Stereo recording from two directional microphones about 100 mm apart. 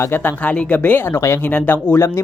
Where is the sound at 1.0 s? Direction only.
25° left (ahead or behind).